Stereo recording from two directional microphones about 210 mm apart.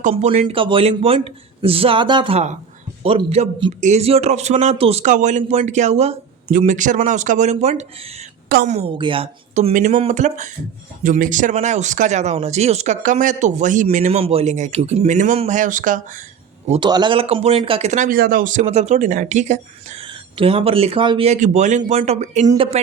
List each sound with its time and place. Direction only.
0.0 s a man's voice: 30° right (ahead or behind)
8.4 s a woman's voice: 45° right (ahead or behind)
8.7 s speech: 25° right (ahead or behind)
16.6 s a man's voice: 25° right (ahead or behind)